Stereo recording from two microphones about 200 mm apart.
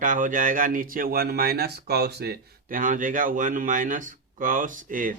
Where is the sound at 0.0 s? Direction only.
40° right (ahead or behind).